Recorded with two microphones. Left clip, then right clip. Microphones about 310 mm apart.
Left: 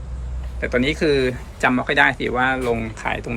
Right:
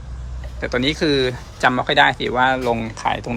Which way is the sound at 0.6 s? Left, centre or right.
Centre.